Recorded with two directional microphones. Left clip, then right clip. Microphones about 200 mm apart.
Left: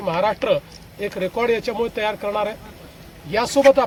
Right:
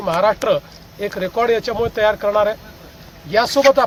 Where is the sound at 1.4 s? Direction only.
35° left (ahead or behind).